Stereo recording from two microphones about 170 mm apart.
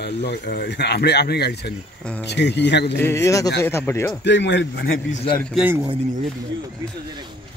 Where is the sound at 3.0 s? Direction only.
15° left (ahead or behind).